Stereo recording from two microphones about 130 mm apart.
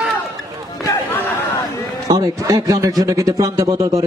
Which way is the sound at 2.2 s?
25° right (ahead or behind).